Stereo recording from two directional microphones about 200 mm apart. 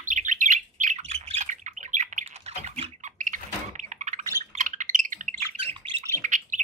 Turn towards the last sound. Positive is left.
turn(degrees=-40)  # may be behind; listen again after turning